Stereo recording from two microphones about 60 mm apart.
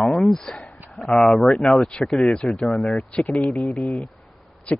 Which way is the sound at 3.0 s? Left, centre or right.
Left.